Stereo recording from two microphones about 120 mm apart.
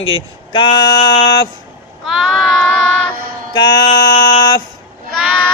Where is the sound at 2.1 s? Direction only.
Centre (ahead or behind).